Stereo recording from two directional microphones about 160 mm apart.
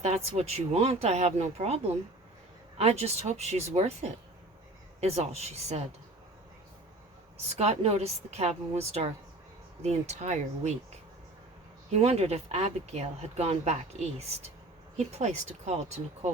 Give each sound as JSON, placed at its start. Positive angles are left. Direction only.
{"t": 0.3, "sound": "speech", "side_deg": -40}
{"t": 7.5, "sound": "speech", "side_deg": -40}
{"t": 11.9, "sound": "speech", "side_deg": -40}